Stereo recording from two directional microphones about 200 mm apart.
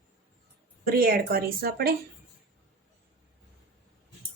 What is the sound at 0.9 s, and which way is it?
Speech, 50° right (ahead or behind).